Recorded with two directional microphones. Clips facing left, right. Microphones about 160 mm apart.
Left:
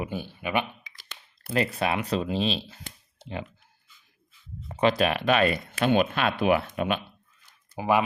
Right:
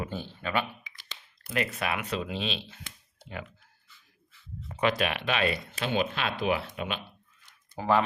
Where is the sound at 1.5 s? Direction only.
30° left (ahead or behind).